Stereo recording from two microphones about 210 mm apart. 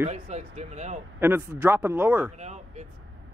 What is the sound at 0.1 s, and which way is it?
Speech, 30° right (ahead or behind).